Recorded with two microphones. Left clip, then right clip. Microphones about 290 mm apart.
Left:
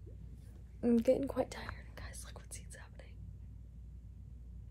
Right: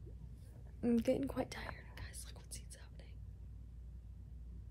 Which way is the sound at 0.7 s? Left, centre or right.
Centre.